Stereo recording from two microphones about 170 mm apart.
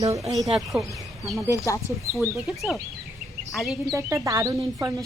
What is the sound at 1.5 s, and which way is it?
Speech, 20° left (ahead or behind).